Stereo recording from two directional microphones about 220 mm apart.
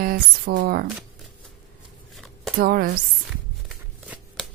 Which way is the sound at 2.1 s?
Centre (ahead or behind).